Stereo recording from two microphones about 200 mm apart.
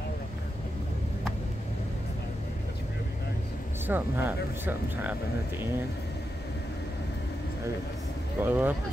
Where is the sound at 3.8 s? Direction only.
10° right (ahead or behind).